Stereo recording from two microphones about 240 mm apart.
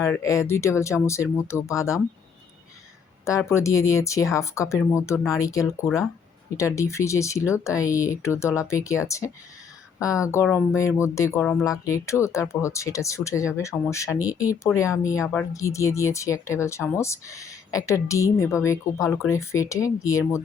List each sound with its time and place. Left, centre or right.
0.0 s speech: centre
3.2 s speech: centre